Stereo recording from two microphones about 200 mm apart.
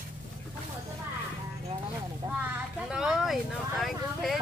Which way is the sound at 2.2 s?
25° right (ahead or behind).